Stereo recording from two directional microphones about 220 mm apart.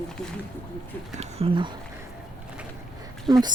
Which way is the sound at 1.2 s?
25° right (ahead or behind).